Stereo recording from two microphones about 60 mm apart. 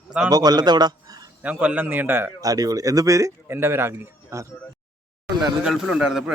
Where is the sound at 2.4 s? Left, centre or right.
Right.